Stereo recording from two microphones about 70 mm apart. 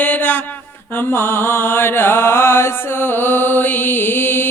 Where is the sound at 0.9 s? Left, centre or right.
Left.